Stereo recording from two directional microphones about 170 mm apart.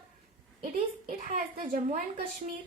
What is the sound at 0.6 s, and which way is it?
A woman's voice, 50° right (ahead or behind).